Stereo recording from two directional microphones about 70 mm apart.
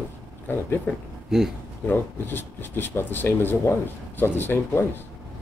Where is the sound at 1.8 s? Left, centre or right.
Left.